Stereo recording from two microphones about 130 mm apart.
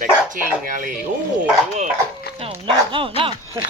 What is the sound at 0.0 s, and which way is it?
Speech, 85° right.